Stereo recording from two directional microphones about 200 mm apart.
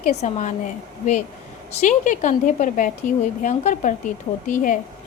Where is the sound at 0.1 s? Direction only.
35° left (ahead or behind).